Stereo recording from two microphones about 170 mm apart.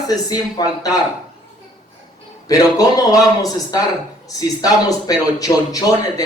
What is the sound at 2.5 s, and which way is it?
Speech, 20° left (ahead or behind).